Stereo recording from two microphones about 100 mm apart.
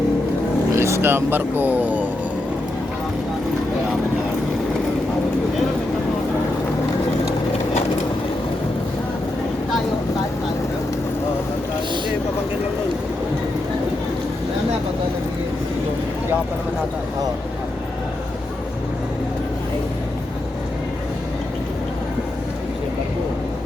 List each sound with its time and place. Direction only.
0.8 s speech: 25° right (ahead or behind)